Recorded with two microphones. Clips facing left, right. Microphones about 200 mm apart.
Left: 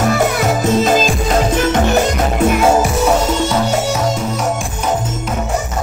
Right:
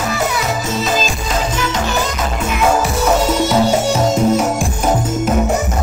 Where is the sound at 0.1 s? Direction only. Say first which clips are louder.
Left 4 dB; 50° left (ahead or behind).